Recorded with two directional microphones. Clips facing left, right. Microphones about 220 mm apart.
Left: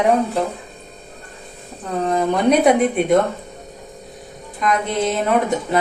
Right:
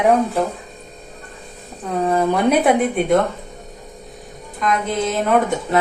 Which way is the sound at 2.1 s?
5° right (ahead or behind).